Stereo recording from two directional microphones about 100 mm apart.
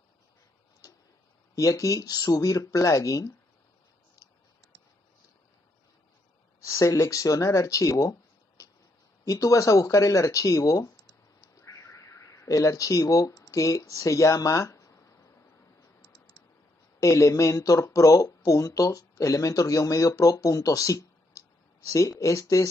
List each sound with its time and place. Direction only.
1.5 s speech: 35° left (ahead or behind)
6.6 s speech: 30° left (ahead or behind)
17.0 s speech: 30° left (ahead or behind)